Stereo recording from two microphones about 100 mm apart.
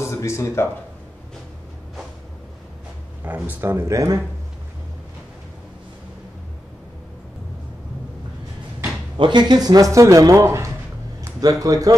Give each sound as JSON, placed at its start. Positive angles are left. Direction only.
{"t": 0.0, "sound": "speech", "side_deg": 30}
{"t": 3.3, "sound": "speech", "side_deg": -15}
{"t": 9.2, "sound": "a man's voice", "side_deg": -50}